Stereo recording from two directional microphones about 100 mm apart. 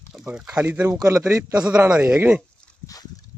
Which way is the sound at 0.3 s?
10° right (ahead or behind).